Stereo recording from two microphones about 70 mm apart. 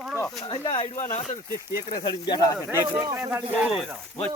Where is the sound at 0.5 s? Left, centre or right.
Left.